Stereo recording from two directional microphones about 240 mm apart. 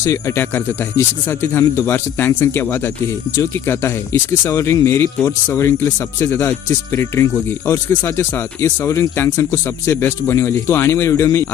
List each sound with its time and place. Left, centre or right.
0.0 s speech: centre